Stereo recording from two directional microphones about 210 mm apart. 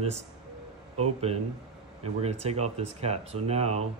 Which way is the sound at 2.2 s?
30° right (ahead or behind).